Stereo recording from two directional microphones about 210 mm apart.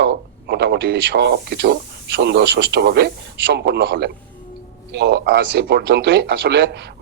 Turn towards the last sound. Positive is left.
turn(degrees=-50)  # may be behind; listen again after turning